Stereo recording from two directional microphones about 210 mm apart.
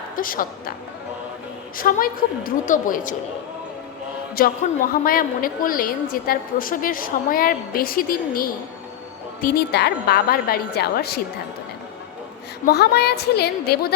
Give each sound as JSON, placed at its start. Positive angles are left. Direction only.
{"t": 0.2, "sound": "a woman's voice", "side_deg": 40}
{"t": 1.7, "sound": "a woman's voice", "side_deg": 40}
{"t": 4.4, "sound": "a woman's voice", "side_deg": 45}
{"t": 12.6, "sound": "a woman's voice", "side_deg": 50}